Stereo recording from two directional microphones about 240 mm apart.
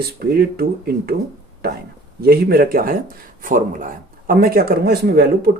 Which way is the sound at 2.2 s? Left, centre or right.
Right.